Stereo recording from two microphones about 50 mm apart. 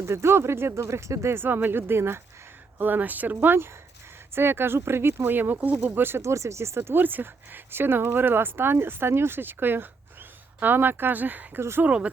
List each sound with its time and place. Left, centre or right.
0.0 s speech: right
1.4 s speech: right
2.7 s speech: right
5.4 s speech: right
5.9 s speech: right
6.2 s speech: right
7.0 s speech: right
11.9 s speech: right